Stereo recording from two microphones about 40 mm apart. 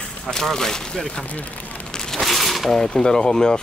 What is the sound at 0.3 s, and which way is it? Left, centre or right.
Speech, centre.